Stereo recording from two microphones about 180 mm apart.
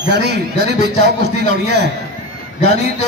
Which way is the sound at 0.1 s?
70° right (ahead or behind).